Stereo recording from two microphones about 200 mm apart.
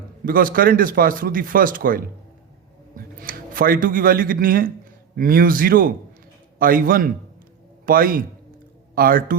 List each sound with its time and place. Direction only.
0.3 s speech: 45° right (ahead or behind)